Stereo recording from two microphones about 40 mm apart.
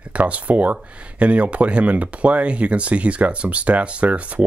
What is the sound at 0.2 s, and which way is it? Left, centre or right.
Speech, right.